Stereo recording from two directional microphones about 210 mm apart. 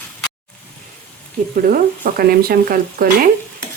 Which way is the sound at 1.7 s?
45° right (ahead or behind).